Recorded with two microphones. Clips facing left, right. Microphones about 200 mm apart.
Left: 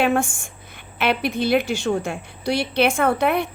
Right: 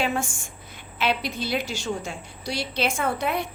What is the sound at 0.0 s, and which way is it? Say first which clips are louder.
A woman's voice: left 7 dB; 55° left (ahead or behind).